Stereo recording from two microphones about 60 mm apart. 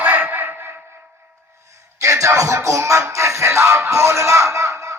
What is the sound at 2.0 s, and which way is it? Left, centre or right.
Music, right.